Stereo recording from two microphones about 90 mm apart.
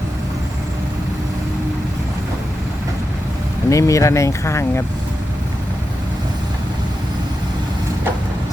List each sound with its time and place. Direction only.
3.7 s speech: 35° left (ahead or behind)